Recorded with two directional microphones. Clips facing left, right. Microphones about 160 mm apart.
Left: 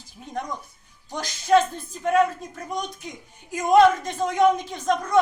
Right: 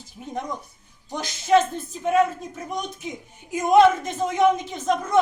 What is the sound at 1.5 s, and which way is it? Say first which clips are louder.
A woman's voice: even; 5° right (ahead or behind).